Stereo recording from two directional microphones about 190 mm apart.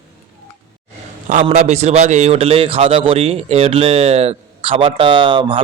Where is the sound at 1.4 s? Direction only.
35° right (ahead or behind).